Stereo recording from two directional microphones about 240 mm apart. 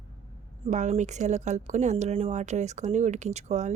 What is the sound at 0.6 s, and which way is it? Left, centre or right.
Speech, right.